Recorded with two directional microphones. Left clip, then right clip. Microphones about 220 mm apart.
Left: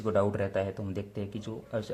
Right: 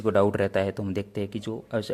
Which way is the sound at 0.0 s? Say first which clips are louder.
Right 6 dB; 40° right (ahead or behind).